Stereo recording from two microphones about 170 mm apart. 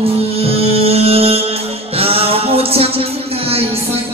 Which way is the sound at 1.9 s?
35° right (ahead or behind).